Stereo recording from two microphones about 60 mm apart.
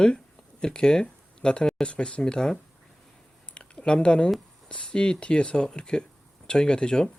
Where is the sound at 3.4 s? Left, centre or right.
Centre.